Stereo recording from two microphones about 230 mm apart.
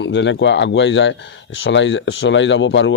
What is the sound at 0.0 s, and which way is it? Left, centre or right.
Speech, left.